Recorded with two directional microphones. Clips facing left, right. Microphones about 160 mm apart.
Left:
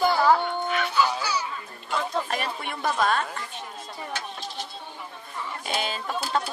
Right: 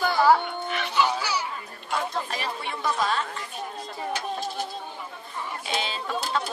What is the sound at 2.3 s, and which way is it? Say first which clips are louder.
Speech: left 1 dB; 55° left (ahead or behind).